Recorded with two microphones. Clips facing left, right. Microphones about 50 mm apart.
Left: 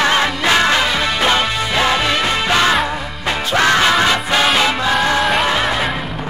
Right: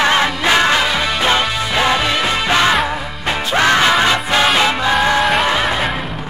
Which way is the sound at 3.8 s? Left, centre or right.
Centre.